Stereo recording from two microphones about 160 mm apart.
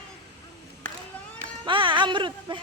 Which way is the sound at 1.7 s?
30° right (ahead or behind).